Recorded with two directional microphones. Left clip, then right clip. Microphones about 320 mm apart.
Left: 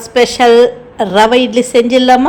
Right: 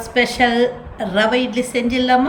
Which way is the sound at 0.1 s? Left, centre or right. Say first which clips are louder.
Left 9 dB; centre.